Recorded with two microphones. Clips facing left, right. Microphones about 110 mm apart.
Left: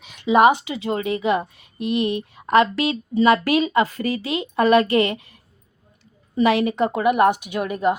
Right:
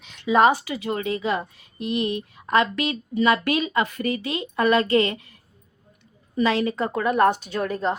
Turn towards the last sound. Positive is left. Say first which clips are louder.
# left 3 dB
turn(degrees=10)  # may be behind; listen again after turning